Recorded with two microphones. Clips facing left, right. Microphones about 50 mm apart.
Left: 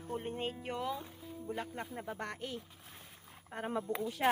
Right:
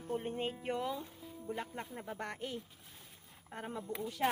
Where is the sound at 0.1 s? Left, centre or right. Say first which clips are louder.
Right 1 dB; centre.